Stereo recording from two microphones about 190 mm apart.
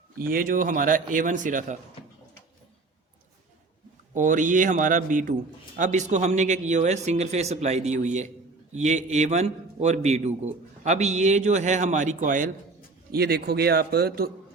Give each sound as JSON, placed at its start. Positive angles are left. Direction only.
{"t": 0.2, "sound": "a man's voice", "side_deg": -50}
{"t": 4.1, "sound": "a man's voice", "side_deg": -40}
{"t": 13.1, "sound": "a man's voice", "side_deg": -55}